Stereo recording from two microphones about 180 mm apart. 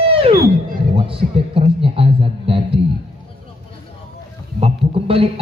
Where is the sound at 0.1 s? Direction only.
30° right (ahead or behind).